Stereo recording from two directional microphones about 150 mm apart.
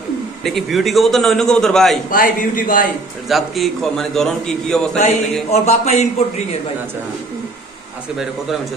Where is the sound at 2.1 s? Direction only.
65° left (ahead or behind).